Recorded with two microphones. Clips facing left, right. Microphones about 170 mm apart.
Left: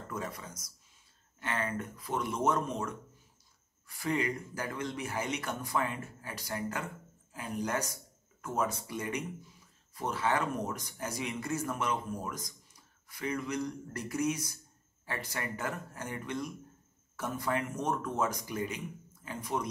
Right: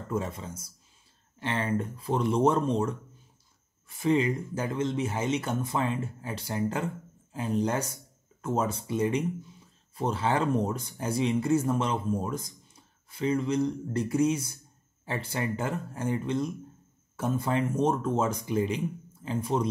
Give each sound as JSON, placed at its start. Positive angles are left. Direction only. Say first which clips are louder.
{"t": 0.1, "sound": "speech", "louder": "right 8 dB", "side_deg": -25}